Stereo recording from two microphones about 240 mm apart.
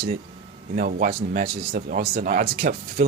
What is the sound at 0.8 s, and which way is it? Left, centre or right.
Speech, right.